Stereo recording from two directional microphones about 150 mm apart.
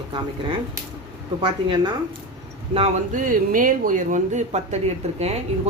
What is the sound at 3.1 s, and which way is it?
Speech, 60° right (ahead or behind).